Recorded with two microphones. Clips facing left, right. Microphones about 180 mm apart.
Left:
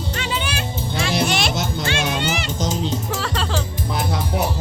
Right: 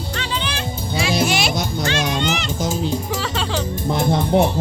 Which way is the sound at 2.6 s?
10° right (ahead or behind).